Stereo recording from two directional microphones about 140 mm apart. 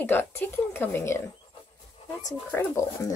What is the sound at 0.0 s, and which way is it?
Speech, 15° left (ahead or behind).